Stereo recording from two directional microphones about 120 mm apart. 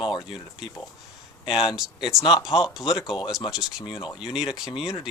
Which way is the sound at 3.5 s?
5° right (ahead or behind).